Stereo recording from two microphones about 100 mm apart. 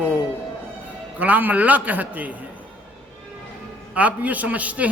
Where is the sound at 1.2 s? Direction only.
15° right (ahead or behind).